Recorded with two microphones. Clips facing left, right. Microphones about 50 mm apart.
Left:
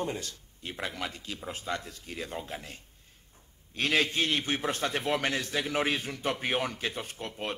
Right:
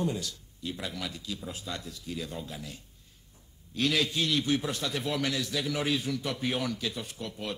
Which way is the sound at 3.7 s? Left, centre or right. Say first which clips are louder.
Left 1 dB; left.